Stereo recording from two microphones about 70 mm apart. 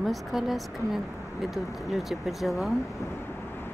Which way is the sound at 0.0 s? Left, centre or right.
Centre.